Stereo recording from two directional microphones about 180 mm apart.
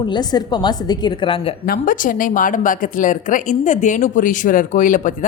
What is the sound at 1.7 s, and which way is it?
Speech, 50° left (ahead or behind).